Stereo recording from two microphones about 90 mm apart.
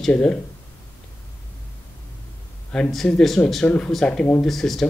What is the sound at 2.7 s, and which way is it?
Speech, 5° left (ahead or behind).